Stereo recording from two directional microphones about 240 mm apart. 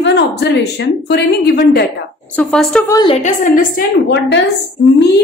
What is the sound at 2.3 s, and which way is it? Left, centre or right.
Speech, centre.